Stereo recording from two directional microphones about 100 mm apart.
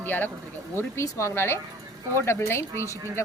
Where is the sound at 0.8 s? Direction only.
30° left (ahead or behind).